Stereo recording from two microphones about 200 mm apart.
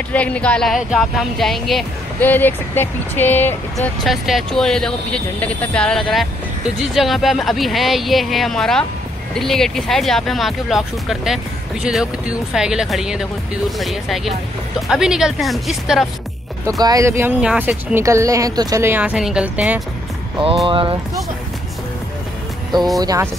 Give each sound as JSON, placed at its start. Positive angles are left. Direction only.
{"t": 0.1, "sound": "speech", "side_deg": 5}
{"t": 16.8, "sound": "speech", "side_deg": -15}
{"t": 20.6, "sound": "speech", "side_deg": -25}
{"t": 22.9, "sound": "speech", "side_deg": -15}